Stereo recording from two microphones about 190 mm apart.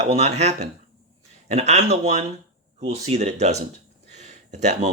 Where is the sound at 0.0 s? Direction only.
35° right (ahead or behind).